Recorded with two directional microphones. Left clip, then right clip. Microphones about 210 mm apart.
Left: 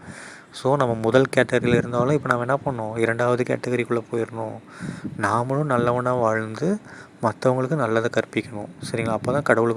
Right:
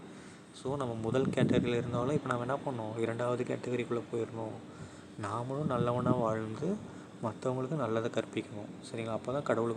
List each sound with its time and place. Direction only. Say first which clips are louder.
0.6 s speech: left 16 dB; 40° left (ahead or behind)